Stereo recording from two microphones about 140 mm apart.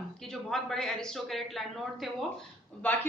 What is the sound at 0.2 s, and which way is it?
Speech, 5° left (ahead or behind).